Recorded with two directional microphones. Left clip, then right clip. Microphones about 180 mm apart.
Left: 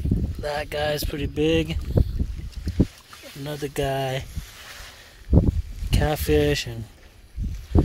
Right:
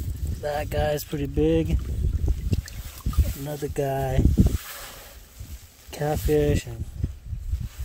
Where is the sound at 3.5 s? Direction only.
15° right (ahead or behind).